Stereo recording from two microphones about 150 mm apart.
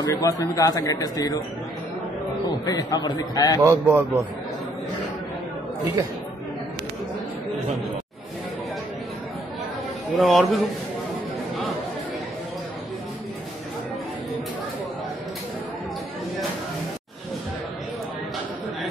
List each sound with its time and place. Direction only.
0.0 s a man's voice: 25° left (ahead or behind)
2.4 s a man's voice: 25° left (ahead or behind)
3.6 s a man's voice: 15° right (ahead or behind)
10.1 s a man's voice: centre (ahead or behind)